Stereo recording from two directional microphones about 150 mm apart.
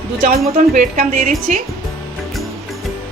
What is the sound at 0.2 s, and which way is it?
Speech, 80° right.